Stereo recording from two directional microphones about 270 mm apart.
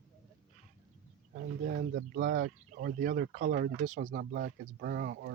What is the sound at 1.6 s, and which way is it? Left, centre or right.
Speech, right.